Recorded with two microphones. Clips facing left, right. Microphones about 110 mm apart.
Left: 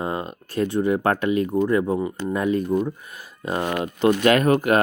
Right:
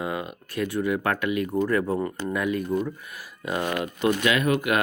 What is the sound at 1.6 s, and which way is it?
Speech, 20° left (ahead or behind).